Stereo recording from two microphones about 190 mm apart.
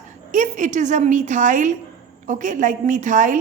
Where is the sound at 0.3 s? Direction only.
40° right (ahead or behind).